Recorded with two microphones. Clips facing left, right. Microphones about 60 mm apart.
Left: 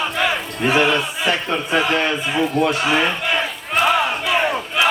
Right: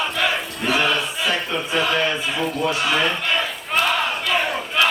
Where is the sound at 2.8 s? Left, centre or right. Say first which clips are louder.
Left 2 dB; left.